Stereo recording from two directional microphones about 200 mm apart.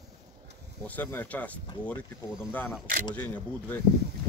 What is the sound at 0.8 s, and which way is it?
Speech, 10° left (ahead or behind).